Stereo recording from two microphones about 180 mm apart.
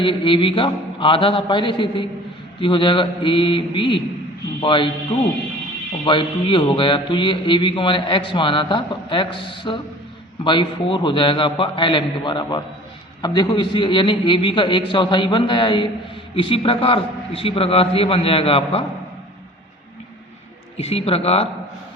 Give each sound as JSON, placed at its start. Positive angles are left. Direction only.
{"t": 0.0, "sound": "speech", "side_deg": 25}
{"t": 6.1, "sound": "a man's voice", "side_deg": 25}
{"t": 20.7, "sound": "a man's voice", "side_deg": 35}